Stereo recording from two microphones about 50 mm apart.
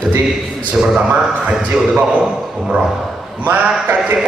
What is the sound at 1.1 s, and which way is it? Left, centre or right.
Speech, right.